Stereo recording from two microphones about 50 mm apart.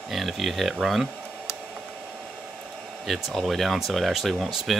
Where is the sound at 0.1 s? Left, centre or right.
Centre.